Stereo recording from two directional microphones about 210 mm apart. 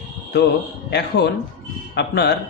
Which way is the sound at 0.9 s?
50° left (ahead or behind).